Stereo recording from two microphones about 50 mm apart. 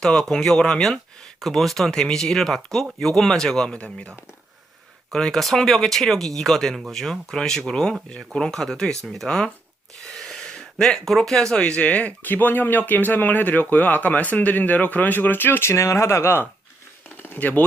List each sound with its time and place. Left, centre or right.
0.0 s speech: centre
5.1 s speech: centre; by 12.3 s left
12.3 s speech: left
15.7 s speech: left
17.4 s speech: left